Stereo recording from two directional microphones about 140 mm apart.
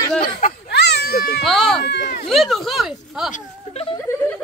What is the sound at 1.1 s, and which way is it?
Baby cry, 90° left.